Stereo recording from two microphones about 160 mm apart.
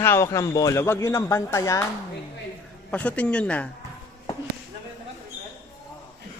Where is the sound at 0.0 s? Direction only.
15° left (ahead or behind).